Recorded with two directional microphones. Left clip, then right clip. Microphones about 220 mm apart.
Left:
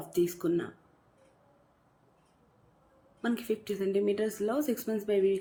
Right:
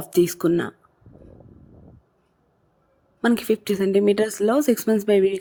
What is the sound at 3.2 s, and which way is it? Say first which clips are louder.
Speech: right 12 dB; 50° right (ahead or behind).